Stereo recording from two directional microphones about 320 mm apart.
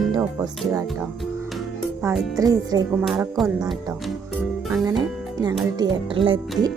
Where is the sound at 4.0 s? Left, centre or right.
Centre.